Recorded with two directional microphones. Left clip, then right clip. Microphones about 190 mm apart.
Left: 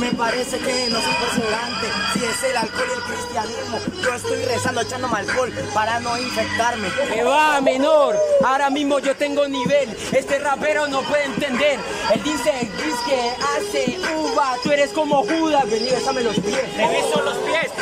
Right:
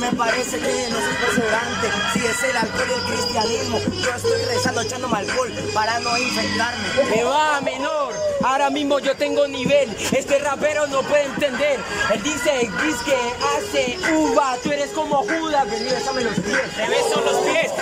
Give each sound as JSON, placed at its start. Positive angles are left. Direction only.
{"t": 0.2, "sound": "a man's voice", "side_deg": 0}
{"t": 5.1, "sound": "a man's voice", "side_deg": 0}
{"t": 7.2, "sound": "speech", "side_deg": 15}
{"t": 8.4, "sound": "a man's voice", "side_deg": 0}
{"t": 14.0, "sound": "a man's voice", "side_deg": 5}
{"t": 17.1, "sound": "speech", "side_deg": -10}